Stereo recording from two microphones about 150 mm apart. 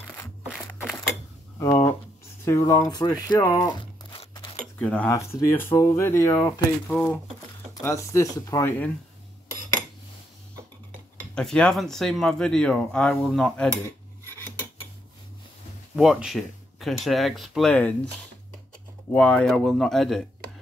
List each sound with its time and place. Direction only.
1.6 s speech: 15° left (ahead or behind)
4.7 s speech: 10° left (ahead or behind)
6.3 s speech: 30° left (ahead or behind)
6.9 s speech: 10° left (ahead or behind)
7.8 s speech: 20° left (ahead or behind)
11.3 s speech: 5° left (ahead or behind)
16.0 s speech: 5° right (ahead or behind)
19.1 s speech: 5° left (ahead or behind)